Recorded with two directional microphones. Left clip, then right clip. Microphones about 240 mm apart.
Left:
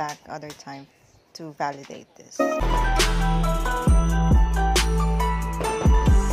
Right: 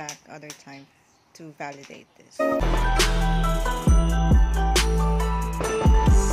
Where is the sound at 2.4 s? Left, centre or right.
Centre.